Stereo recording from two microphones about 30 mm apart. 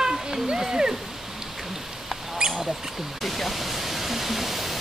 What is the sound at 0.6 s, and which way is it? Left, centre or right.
Speech, right.